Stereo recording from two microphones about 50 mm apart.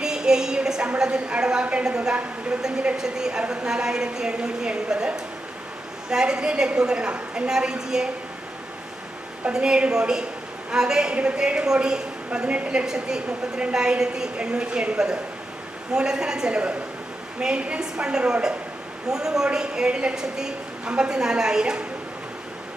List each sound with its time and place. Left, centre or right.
0.0 s a sound: centre
0.9 s a woman's voice: centre
9.6 s a woman's voice: centre